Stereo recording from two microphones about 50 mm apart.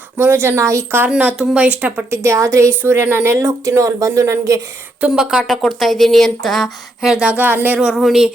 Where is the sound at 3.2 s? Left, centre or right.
Right.